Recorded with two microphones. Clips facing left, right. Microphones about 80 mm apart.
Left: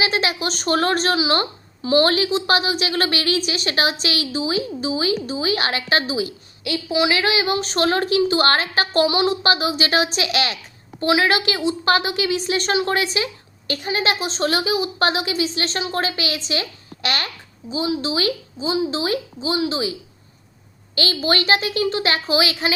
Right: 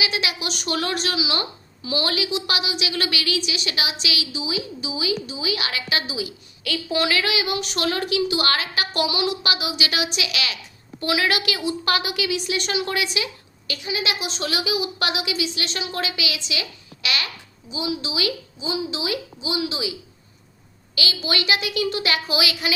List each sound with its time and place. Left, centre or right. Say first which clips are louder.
0.0 s speech: left 5 dB; left
6.8 s a woman's voice: left 3 dB; centre
7.1 s speech: left 4 dB; left
11.0 s speech: left 5 dB; left